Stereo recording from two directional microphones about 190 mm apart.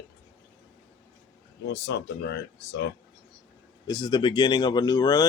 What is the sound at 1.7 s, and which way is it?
Speech, 60° left (ahead or behind).